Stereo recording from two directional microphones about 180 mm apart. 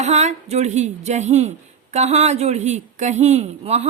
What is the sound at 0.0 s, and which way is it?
Speech, 40° right (ahead or behind).